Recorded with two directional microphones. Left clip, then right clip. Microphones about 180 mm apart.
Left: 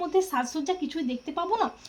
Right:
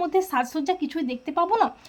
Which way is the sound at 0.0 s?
25° right (ahead or behind).